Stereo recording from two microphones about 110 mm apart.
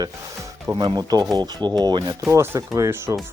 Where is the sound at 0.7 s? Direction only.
25° right (ahead or behind).